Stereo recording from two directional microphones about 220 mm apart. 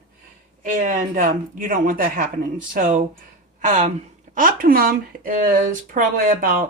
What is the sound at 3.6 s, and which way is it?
A woman's voice, 35° right (ahead or behind).